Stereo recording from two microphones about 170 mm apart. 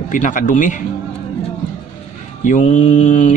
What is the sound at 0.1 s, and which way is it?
Speech, 50° left (ahead or behind).